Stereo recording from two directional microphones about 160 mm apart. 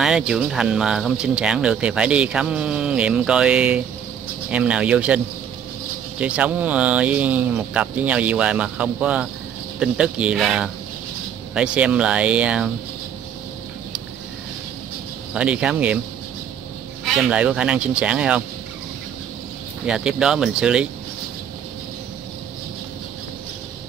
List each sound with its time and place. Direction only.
0.0 s speech: 5° right (ahead or behind)
15.3 s speech: 5° right (ahead or behind)
17.0 s speech: centre (ahead or behind)
19.9 s speech: 5° right (ahead or behind)